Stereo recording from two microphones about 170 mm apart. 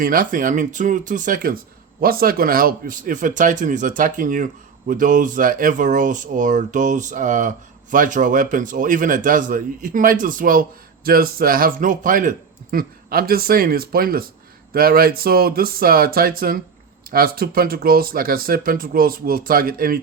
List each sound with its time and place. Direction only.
0.0 s speech: 55° right (ahead or behind)